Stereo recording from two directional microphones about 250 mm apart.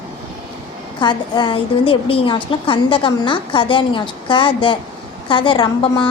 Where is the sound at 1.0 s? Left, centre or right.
Centre.